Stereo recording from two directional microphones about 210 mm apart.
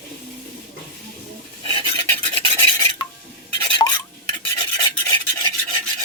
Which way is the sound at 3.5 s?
20° left (ahead or behind).